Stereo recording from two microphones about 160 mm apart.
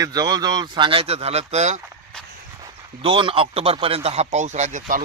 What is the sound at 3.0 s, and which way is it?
Speech, 30° right (ahead or behind).